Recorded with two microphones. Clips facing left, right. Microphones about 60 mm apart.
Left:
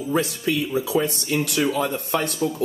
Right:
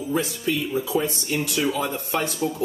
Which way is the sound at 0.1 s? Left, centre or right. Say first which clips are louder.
Left 2 dB; left.